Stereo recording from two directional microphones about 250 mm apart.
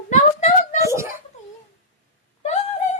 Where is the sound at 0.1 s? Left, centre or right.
Left.